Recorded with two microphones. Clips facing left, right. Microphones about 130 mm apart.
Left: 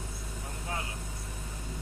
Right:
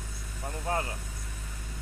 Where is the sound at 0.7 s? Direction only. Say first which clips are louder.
Right 7 dB; 45° right (ahead or behind).